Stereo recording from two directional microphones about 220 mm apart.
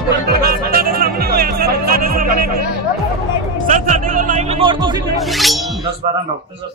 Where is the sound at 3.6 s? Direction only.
35° right (ahead or behind).